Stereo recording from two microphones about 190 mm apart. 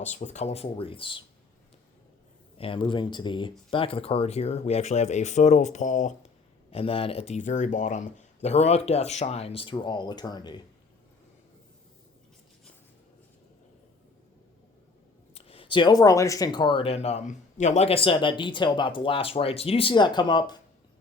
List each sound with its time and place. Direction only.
0.0 s speech: 40° left (ahead or behind)
2.6 s speech: 25° left (ahead or behind)
15.4 s speech: 30° left (ahead or behind)